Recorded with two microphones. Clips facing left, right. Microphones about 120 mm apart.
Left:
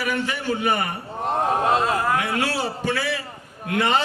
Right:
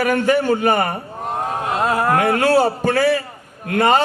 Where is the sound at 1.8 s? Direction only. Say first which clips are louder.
Right 5 dB; 55° right (ahead or behind).